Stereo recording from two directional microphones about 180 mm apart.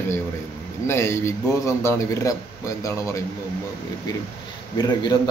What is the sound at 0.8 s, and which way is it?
A man's voice, 15° left (ahead or behind).